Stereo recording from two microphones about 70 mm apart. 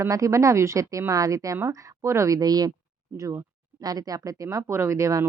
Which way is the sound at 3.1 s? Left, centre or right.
Right.